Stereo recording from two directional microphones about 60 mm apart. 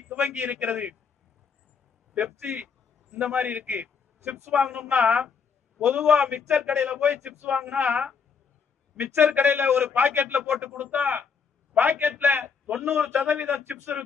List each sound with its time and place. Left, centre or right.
0.1 s a man's voice: right
2.1 s speech: centre
2.5 s a sound: right
3.3 s a man's voice: right
5.8 s a man's voice: centre
6.6 s a woman's voice: right
7.8 s a woman's voice: right